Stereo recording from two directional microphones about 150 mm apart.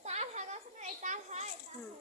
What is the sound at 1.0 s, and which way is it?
Children playing, 50° right (ahead or behind).